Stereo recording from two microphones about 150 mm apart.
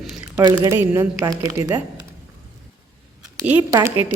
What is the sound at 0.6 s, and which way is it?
Speech, 20° right (ahead or behind).